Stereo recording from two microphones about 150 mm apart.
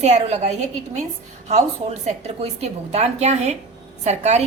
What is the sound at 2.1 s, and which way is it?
A woman's voice, 45° right (ahead or behind).